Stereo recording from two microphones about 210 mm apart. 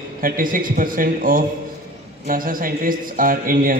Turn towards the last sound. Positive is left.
turn(degrees=-40)  # may be behind; listen again after turning